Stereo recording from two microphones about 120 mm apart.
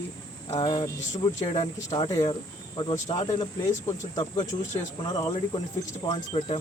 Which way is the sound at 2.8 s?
35° left (ahead or behind).